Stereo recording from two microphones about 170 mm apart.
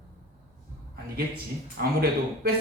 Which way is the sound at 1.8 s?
65° right (ahead or behind).